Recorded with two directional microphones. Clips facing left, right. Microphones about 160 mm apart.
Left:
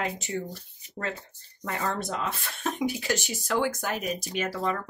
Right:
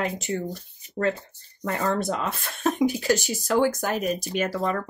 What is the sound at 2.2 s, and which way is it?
Speech, 45° right (ahead or behind).